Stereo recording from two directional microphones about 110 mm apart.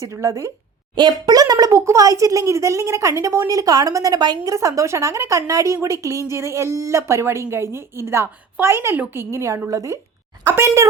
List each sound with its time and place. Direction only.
0.0 s a woman's voice: 30° right (ahead or behind)
0.9 s a woman's voice: 40° right (ahead or behind)